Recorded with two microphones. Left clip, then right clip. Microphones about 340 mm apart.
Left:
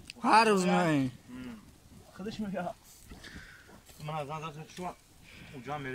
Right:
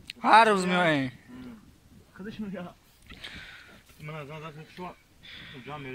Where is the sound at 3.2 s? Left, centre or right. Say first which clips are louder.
Right 7 dB; centre.